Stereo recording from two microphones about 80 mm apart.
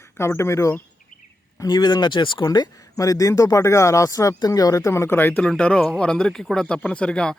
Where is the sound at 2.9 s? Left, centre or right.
Left.